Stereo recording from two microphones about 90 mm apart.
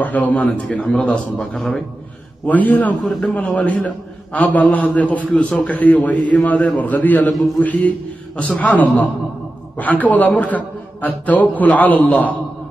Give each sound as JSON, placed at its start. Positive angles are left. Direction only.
{"t": 0.0, "sound": "a man's voice", "side_deg": 20}
{"t": 3.0, "sound": "a man's voice", "side_deg": 0}
{"t": 3.3, "sound": "a man's voice", "side_deg": 15}